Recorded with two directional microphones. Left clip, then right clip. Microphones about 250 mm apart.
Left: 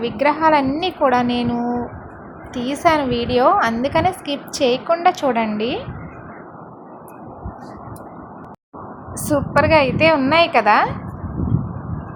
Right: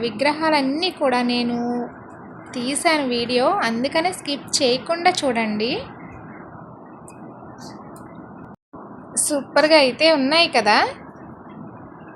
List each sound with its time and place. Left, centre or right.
0.0 s a woman's voice: centre
9.1 s a woman's voice: centre